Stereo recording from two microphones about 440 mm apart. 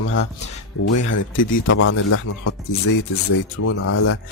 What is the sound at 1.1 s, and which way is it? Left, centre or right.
A man's voice, left.